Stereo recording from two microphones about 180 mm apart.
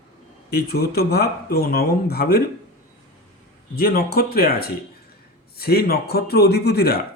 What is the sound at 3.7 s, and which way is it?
Speech, 60° left (ahead or behind).